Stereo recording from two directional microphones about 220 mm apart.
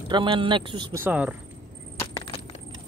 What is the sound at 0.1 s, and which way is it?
Speech, 20° right (ahead or behind).